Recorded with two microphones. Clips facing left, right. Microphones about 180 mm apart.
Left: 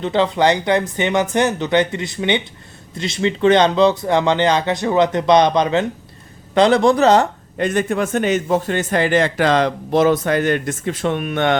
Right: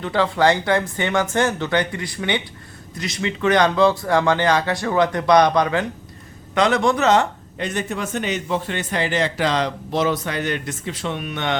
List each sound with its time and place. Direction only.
0.0 s speech: 20° left (ahead or behind)
6.5 s speech: 30° left (ahead or behind)
7.6 s a man's voice: 50° left (ahead or behind)